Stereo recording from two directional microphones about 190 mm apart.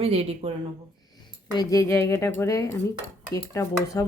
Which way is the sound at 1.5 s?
15° left (ahead or behind).